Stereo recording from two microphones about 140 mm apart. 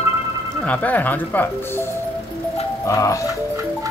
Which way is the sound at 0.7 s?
10° left (ahead or behind).